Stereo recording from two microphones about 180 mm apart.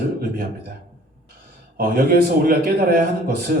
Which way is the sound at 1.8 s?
55° right (ahead or behind).